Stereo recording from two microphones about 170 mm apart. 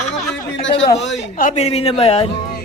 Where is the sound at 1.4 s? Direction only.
40° left (ahead or behind).